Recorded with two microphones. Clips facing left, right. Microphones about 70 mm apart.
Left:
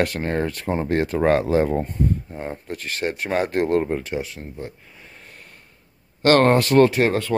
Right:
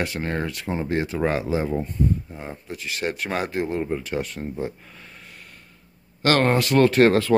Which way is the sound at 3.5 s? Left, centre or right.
Left.